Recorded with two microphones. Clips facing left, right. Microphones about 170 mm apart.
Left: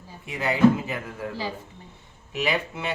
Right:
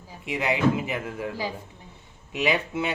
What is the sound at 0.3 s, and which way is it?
Speech, 20° right (ahead or behind).